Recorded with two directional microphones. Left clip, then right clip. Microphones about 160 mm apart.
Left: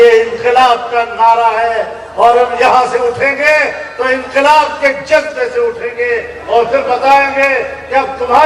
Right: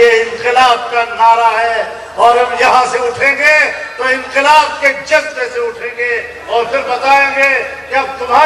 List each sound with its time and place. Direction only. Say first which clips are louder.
0.0 s a man's voice: left 2 dB; 10° left (ahead or behind)